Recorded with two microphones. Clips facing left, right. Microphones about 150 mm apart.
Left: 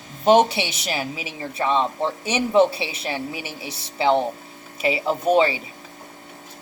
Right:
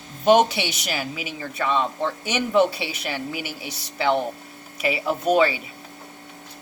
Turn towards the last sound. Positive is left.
turn(degrees=25)  # may be behind; listen again after turning